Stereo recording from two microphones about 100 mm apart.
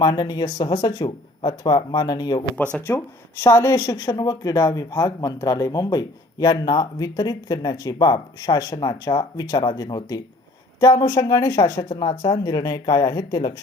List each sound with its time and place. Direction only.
0.0 s speech: 40° left (ahead or behind)
2.7 s a woman's voice: 20° left (ahead or behind)
3.8 s speech: 45° left (ahead or behind)